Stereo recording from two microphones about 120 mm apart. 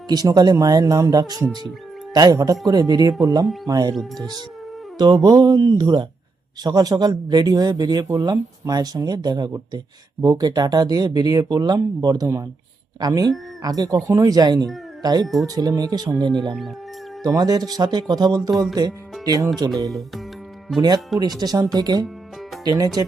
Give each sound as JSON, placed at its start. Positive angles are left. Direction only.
{"t": 0.1, "sound": "speech", "side_deg": -35}
{"t": 4.9, "sound": "speech", "side_deg": -35}
{"t": 19.9, "sound": "speech", "side_deg": 0}
{"t": 21.2, "sound": "speech", "side_deg": -35}